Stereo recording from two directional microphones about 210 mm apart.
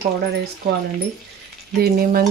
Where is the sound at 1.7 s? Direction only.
45° right (ahead or behind).